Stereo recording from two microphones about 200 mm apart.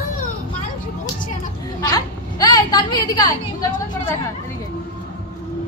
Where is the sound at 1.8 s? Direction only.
20° left (ahead or behind).